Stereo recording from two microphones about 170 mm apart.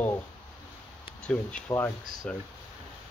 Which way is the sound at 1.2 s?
5° left (ahead or behind).